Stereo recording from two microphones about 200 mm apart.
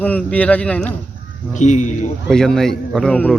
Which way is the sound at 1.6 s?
35° left (ahead or behind).